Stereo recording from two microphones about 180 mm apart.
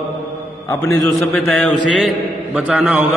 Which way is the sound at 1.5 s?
Centre (ahead or behind).